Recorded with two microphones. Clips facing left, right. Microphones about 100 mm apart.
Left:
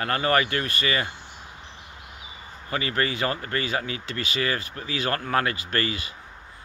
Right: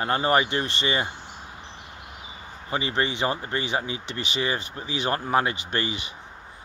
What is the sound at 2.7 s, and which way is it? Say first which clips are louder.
Speech: even; 20° right (ahead or behind).